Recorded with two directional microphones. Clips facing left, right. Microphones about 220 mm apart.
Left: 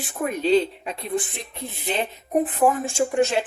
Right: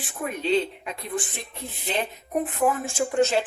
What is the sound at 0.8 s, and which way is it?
Speech, 30° left (ahead or behind).